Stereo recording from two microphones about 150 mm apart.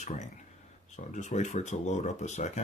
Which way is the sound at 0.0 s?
55° left (ahead or behind).